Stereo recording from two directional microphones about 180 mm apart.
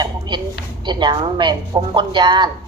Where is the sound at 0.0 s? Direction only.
25° right (ahead or behind).